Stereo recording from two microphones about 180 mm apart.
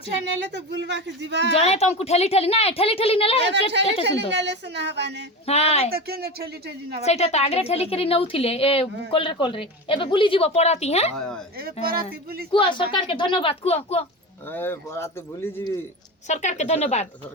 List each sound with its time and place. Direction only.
0.3 s a woman's voice: 75° right (ahead or behind)
1.6 s a woman's voice: 35° left (ahead or behind)
4.0 s a woman's voice: 75° right (ahead or behind)
5.5 s a woman's voice: 35° left (ahead or behind)
5.9 s speech: 60° right (ahead or behind)
7.0 s a woman's voice: 35° left (ahead or behind)
11.2 s speech: 5° left (ahead or behind)
11.5 s speech: 60° right (ahead or behind)
12.5 s speech: 25° left (ahead or behind)
14.5 s speech: 10° left (ahead or behind)
16.2 s a woman's voice: 40° left (ahead or behind)